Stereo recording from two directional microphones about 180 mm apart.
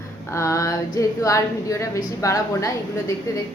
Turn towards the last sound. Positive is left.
turn(degrees=15)  # may be behind; listen again after turning